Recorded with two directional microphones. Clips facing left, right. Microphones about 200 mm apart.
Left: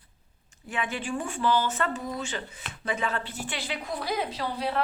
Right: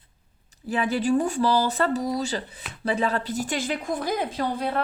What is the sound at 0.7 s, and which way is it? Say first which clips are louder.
A woman's voice: right 9 dB; 35° right (ahead or behind).